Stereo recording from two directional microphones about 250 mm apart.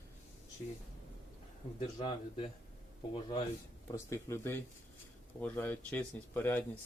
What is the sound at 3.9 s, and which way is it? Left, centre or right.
Speech, centre.